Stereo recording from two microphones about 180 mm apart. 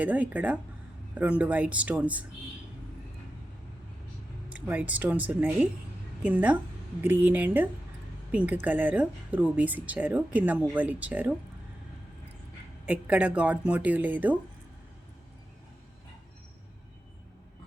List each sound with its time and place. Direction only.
0.0 s speech: 10° right (ahead or behind)
4.4 s a woman's voice: 5° right (ahead or behind)
12.8 s speech: 5° right (ahead or behind)